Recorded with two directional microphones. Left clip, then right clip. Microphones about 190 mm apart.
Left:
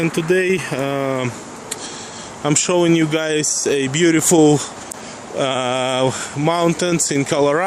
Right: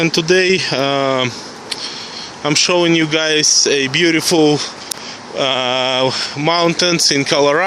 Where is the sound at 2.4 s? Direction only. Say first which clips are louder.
Right 3 dB; 15° left (ahead or behind).